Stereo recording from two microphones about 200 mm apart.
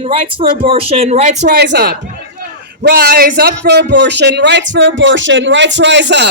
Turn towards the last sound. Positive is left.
turn(degrees=-60)  # may be behind; listen again after turning